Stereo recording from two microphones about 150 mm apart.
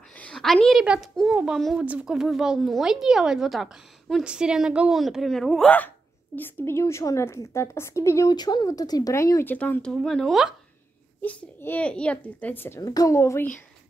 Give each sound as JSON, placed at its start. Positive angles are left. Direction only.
{"t": 0.2, "sound": "a woman's voice", "side_deg": 5}
{"t": 11.2, "sound": "a child's voice", "side_deg": 10}